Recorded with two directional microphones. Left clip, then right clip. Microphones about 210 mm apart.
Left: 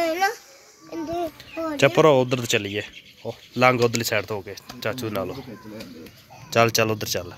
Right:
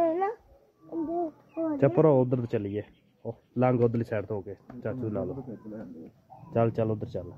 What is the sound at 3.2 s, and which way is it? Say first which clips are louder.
Speech: left 5 dB; 25° left (ahead or behind).